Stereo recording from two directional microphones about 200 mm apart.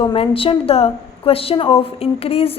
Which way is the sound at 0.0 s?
25° left (ahead or behind).